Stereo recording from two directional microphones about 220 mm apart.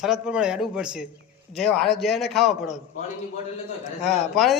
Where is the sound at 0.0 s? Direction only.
5° right (ahead or behind).